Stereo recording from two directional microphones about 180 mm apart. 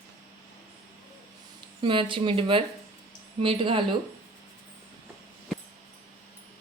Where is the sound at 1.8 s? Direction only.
30° right (ahead or behind).